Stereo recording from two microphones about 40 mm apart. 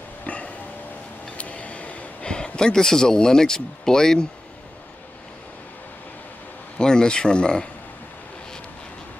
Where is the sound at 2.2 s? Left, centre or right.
Left.